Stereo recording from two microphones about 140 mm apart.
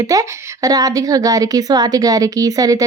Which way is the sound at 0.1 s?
25° right (ahead or behind).